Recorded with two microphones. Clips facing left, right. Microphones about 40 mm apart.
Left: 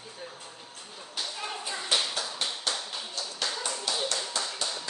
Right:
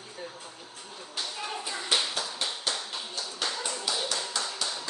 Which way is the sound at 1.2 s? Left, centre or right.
Centre.